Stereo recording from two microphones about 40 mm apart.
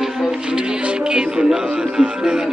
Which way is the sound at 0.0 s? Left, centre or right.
Centre.